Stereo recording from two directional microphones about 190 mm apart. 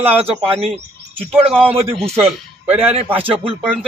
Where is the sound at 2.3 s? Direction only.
10° right (ahead or behind).